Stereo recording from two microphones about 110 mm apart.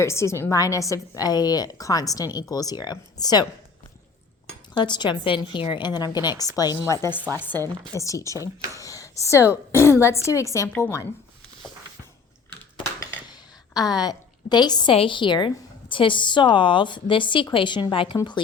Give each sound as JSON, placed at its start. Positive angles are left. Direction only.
{"t": 0.0, "sound": "a woman's voice", "side_deg": 25}
{"t": 4.7, "sound": "a woman's voice", "side_deg": 45}
{"t": 14.0, "sound": "a woman's voice", "side_deg": 40}
{"t": 14.9, "sound": "a woman's voice", "side_deg": 50}